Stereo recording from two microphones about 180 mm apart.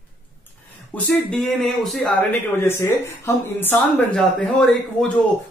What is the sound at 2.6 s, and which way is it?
Speech, 15° left (ahead or behind).